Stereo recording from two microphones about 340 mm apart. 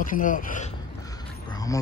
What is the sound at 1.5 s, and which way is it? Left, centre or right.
Dog, centre.